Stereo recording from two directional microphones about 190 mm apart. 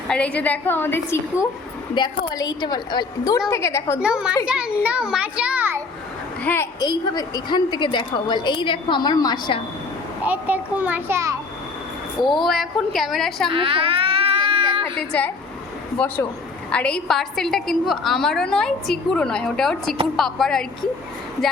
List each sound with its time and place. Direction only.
0.1 s a woman's voice: 5° left (ahead or behind)
4.0 s a woman's voice: 5° right (ahead or behind)
6.4 s a woman's voice: 10° left (ahead or behind)
10.2 s a child's voice: 10° right (ahead or behind)
12.2 s a woman's voice: centre (ahead or behind)
13.5 s baby cry: 30° right (ahead or behind)
16.6 s a woman's voice: 5° left (ahead or behind)